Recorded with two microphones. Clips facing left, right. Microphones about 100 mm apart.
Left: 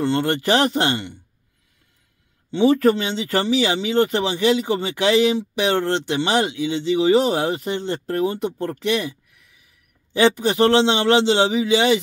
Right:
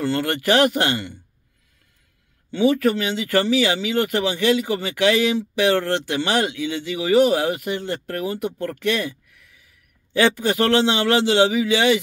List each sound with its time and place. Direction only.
0.0 s speech: 25° left (ahead or behind)
2.5 s speech: 35° left (ahead or behind)